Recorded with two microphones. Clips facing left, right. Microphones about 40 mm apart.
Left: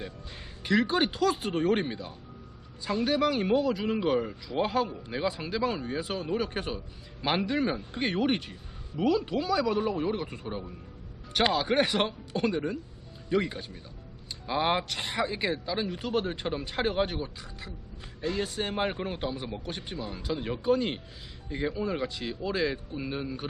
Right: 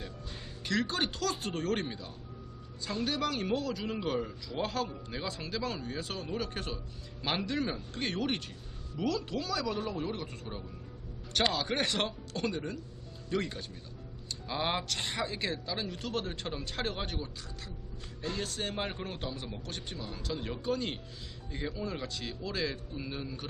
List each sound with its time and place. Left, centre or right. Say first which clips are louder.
0.6 s speech: left 6 dB; centre
18.2 s speech: left 6 dB; left
18.4 s speech: left 6 dB; centre